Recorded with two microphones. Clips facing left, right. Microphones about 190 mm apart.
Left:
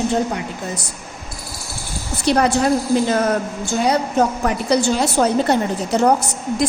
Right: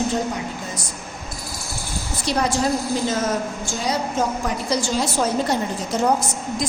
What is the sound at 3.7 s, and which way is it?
A woman's voice, 60° left (ahead or behind).